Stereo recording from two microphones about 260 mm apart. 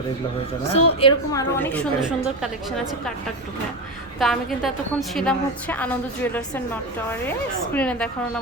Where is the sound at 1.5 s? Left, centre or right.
Centre.